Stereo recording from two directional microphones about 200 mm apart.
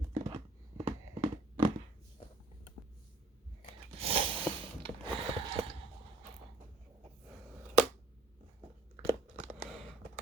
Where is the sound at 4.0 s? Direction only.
30° right (ahead or behind).